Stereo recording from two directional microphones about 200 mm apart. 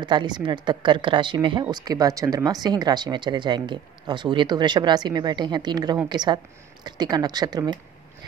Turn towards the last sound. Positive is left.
turn(degrees=-20)  # may be behind; listen again after turning